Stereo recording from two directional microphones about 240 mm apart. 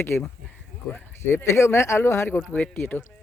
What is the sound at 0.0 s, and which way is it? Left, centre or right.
Speech, centre.